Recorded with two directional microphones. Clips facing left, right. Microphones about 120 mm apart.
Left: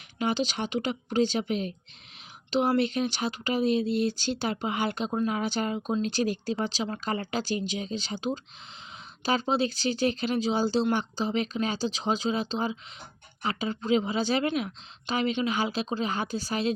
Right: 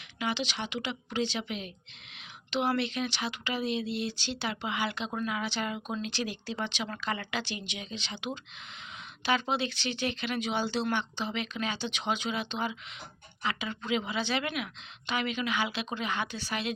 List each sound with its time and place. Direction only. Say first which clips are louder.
0.2 s speech: left 5 dB; 40° left (ahead or behind)